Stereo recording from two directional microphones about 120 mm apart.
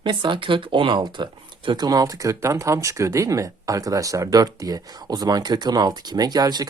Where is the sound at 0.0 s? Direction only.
40° right (ahead or behind).